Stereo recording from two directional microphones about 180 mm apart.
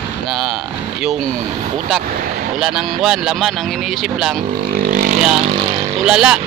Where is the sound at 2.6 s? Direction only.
Centre (ahead or behind).